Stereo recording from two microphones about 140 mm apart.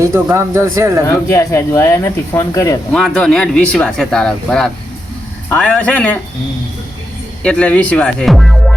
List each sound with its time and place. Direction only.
0.0 s speech: 20° right (ahead or behind)
1.0 s speech: 20° left (ahead or behind)
2.9 s speech: 5° left (ahead or behind)
7.4 s speech: 10° left (ahead or behind)